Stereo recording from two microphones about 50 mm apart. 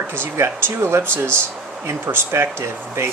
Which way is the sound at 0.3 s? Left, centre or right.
Right.